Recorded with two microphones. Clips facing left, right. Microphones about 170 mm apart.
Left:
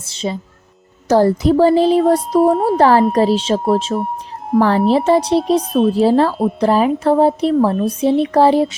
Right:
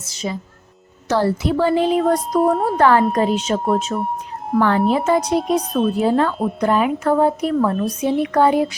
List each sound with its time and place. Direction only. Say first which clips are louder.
0.0 s music: left 4 dB; 25° left (ahead or behind)
1.0 s speech: left 6 dB; 40° left (ahead or behind)
2.4 s speech: left 4 dB; centre (ahead or behind)
2.7 s speech: left 2 dB; 35° left (ahead or behind)